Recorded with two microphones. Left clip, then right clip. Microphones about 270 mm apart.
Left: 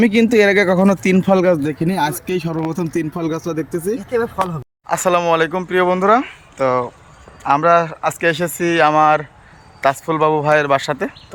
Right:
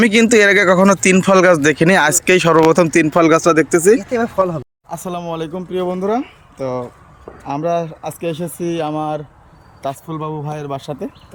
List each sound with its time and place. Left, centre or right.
0.0 s speech: centre
3.5 s speech: centre
4.9 s speech: left
6.1 s speech: centre
8.4 s speech: left